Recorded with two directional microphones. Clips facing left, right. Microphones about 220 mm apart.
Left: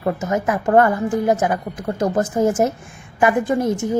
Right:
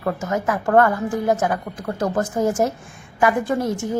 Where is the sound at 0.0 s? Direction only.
20° left (ahead or behind).